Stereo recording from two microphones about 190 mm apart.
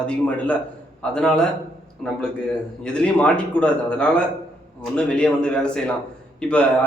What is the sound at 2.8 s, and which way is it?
A man's voice, 5° left (ahead or behind).